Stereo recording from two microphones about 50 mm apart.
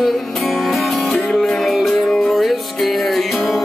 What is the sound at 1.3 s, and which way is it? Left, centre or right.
Music, centre.